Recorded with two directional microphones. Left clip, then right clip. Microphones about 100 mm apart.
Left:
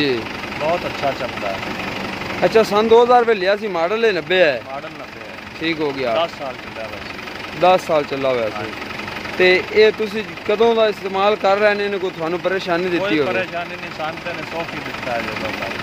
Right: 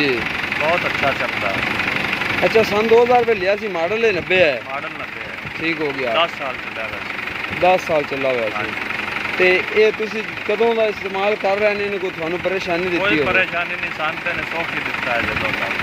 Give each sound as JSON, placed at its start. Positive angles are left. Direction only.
{"t": 2.4, "sound": "speech", "side_deg": 15}
{"t": 5.6, "sound": "speech", "side_deg": 5}
{"t": 7.6, "sound": "speech", "side_deg": 10}
{"t": 9.4, "sound": "speech", "side_deg": 20}
{"t": 12.4, "sound": "speech", "side_deg": 5}